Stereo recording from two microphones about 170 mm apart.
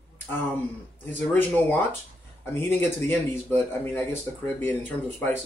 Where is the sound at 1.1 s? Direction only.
10° left (ahead or behind).